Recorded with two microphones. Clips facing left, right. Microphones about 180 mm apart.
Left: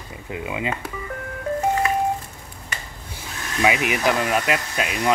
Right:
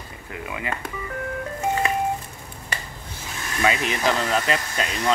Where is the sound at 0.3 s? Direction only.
20° left (ahead or behind).